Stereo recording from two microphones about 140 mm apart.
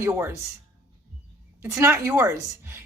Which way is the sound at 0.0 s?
20° right (ahead or behind).